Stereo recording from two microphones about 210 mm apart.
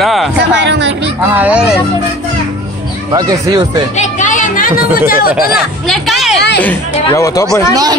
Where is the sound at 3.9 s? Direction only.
35° left (ahead or behind).